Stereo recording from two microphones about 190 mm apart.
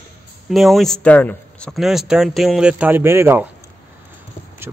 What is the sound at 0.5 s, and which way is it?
Speech, centre (ahead or behind).